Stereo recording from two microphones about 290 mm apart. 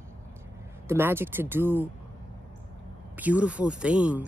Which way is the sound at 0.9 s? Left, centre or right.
Centre.